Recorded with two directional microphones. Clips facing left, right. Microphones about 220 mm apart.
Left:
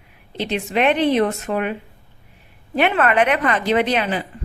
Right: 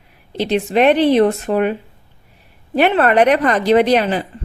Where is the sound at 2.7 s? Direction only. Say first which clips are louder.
Right 4 dB; 35° right (ahead or behind).